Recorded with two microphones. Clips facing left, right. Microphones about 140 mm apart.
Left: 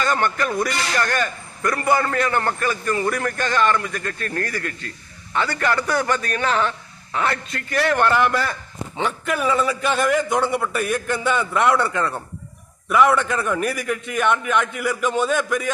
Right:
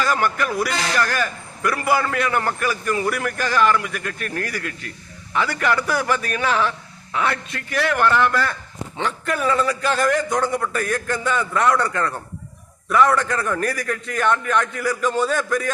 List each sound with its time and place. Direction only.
0.0 s a man's voice: 5° right (ahead or behind)
8.1 s a man's voice: 10° left (ahead or behind)
15.0 s a man's voice: 20° left (ahead or behind)